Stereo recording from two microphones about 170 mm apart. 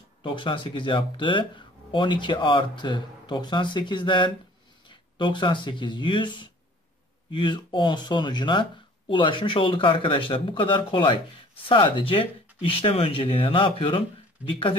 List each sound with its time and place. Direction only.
0.2 s speech: 30° left (ahead or behind)